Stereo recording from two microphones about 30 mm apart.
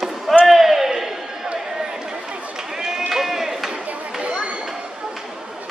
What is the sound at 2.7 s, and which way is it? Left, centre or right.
Run, centre.